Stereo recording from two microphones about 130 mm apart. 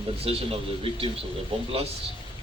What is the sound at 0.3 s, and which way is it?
Speech, 50° right (ahead or behind).